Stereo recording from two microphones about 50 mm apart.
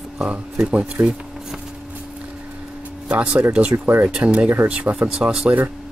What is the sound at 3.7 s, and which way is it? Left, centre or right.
Speech, right.